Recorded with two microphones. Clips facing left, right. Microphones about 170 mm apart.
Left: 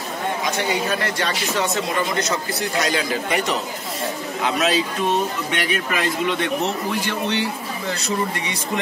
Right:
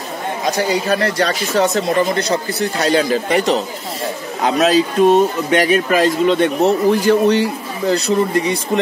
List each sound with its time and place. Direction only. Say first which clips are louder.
0.5 s speech: right 8 dB; 35° right (ahead or behind)